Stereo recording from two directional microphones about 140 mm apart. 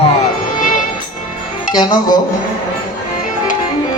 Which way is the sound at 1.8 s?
30° left (ahead or behind).